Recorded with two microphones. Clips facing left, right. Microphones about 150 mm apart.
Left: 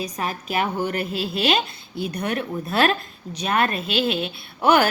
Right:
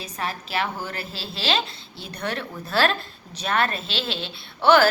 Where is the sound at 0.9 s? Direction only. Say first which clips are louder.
Left 9 dB; 30° right (ahead or behind).